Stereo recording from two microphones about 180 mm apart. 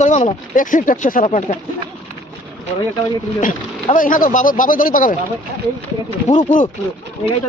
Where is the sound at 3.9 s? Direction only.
50° left (ahead or behind).